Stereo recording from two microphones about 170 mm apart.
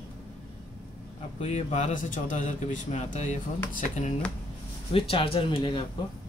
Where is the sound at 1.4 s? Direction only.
40° left (ahead or behind).